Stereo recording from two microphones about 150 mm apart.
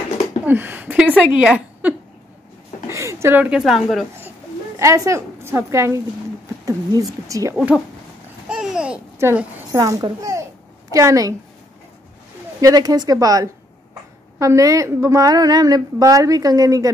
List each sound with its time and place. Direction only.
0.5 s a woman's voice: 15° right (ahead or behind)
4.7 s a woman's voice: 20° right (ahead or behind)
8.5 s babbling: 5° right (ahead or behind)
9.7 s a child's voice: 25° right (ahead or behind)
12.5 s a woman's voice: 25° right (ahead or behind)